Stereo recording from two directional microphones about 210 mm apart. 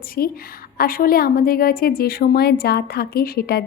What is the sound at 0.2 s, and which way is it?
A woman's voice, 45° left (ahead or behind).